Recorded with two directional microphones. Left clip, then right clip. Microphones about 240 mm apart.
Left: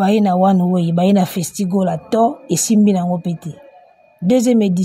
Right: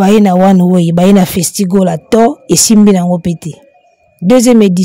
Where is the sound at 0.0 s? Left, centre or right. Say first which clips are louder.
Right 6 dB; right.